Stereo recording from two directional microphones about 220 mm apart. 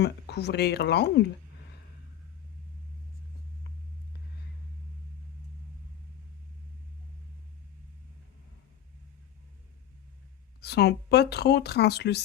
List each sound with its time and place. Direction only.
0.0 s speech: 50° left (ahead or behind)
10.6 s speech: 50° left (ahead or behind)